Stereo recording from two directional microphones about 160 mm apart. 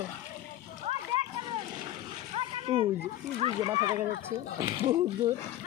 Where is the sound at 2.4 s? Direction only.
35° right (ahead or behind).